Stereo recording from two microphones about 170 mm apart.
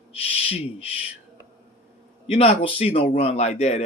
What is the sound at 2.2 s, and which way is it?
Speech, 35° left (ahead or behind).